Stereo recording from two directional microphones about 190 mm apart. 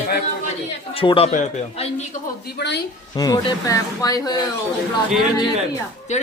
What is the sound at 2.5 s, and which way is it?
Speech, 60° left (ahead or behind).